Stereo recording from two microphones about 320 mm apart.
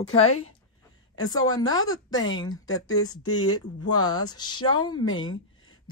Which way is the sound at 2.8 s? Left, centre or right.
Left.